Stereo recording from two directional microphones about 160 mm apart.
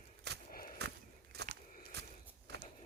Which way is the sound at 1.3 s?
80° right.